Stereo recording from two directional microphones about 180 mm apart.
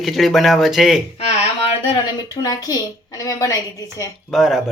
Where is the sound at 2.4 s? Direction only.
20° left (ahead or behind).